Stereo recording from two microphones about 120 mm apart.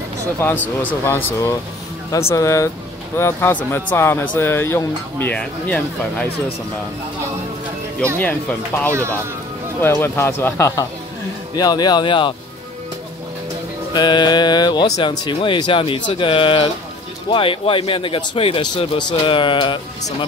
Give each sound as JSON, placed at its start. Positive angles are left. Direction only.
{"t": 0.4, "sound": "speech", "side_deg": 15}
{"t": 8.2, "sound": "speech", "side_deg": 15}
{"t": 11.5, "sound": "speech", "side_deg": 35}
{"t": 13.9, "sound": "speech", "side_deg": 35}